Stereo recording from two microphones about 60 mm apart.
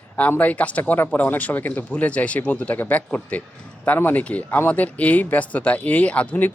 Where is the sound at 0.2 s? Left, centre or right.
Left.